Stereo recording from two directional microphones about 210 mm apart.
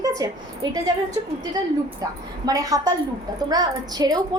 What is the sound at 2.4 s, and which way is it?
A woman's voice, 15° right (ahead or behind).